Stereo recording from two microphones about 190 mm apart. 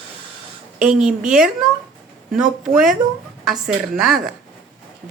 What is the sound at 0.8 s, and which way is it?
Speech, 5° right (ahead or behind).